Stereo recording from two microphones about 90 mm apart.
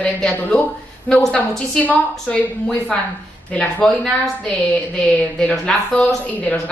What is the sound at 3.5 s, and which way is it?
Speech, 15° left (ahead or behind).